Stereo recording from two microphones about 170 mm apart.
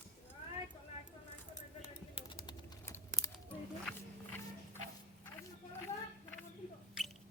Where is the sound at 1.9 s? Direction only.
30° left (ahead or behind).